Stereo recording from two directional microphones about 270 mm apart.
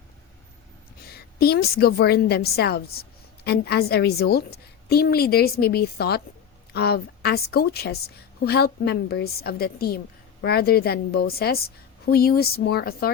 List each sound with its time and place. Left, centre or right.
1.0 s a woman's voice: left